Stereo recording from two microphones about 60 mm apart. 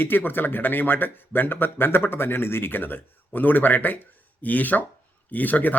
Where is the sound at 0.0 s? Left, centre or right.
Left.